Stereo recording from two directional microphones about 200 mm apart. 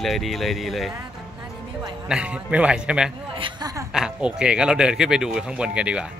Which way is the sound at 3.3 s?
20° right (ahead or behind).